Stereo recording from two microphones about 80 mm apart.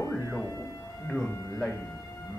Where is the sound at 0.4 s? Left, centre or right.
Left.